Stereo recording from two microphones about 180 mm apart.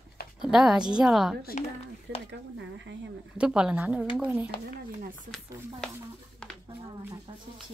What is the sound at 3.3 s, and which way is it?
A woman's voice, 5° right (ahead or behind).